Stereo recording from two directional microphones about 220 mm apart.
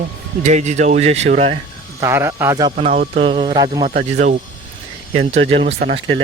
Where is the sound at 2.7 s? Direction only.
35° right (ahead or behind).